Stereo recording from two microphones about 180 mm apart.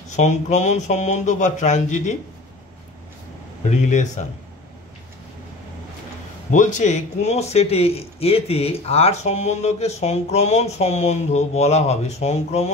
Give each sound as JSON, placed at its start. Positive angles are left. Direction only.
{"t": 0.1, "sound": "speech", "side_deg": 40}
{"t": 3.6, "sound": "speech", "side_deg": 40}
{"t": 6.5, "sound": "speech", "side_deg": 45}